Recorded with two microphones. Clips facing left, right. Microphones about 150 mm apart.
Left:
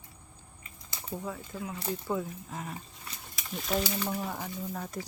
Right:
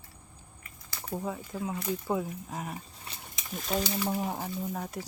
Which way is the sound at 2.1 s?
15° right (ahead or behind).